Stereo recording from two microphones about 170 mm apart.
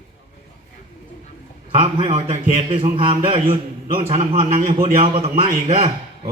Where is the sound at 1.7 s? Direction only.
30° right (ahead or behind).